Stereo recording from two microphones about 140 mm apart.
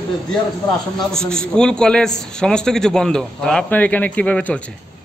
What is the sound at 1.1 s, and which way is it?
A man's voice, 5° left (ahead or behind).